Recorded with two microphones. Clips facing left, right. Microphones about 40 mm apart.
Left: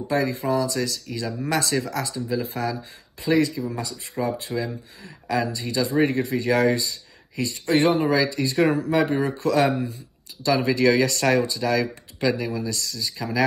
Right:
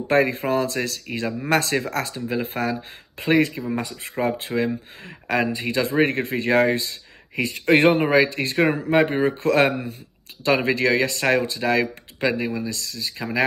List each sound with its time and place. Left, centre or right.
0.1 s speech: right
11.4 s speech: right